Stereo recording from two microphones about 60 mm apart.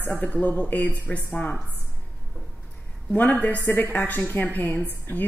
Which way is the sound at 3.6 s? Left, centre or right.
Left.